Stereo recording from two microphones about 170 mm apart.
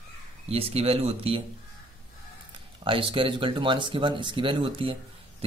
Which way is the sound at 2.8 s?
30° right (ahead or behind).